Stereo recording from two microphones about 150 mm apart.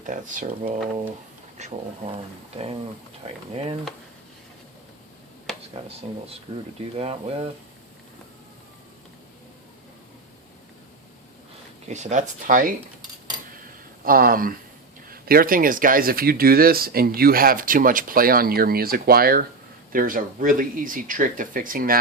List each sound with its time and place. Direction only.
0.0 s speech: 60° right (ahead or behind)
3.2 s speech: 40° right (ahead or behind)
5.5 s a sound: 5° left (ahead or behind)
6.9 s speech: 40° right (ahead or behind)
11.9 s speech: 50° right (ahead or behind)
14.0 s speech: 75° right (ahead or behind)
19.9 s speech: 70° right (ahead or behind)